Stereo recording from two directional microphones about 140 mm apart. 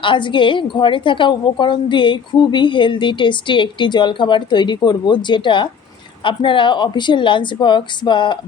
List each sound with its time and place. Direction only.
0.0 s a woman's voice: 35° left (ahead or behind)